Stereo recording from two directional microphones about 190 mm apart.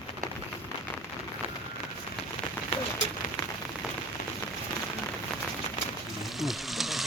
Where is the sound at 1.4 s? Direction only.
30° right (ahead or behind).